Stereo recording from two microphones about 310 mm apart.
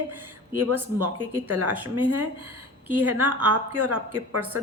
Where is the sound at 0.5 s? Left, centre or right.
Right.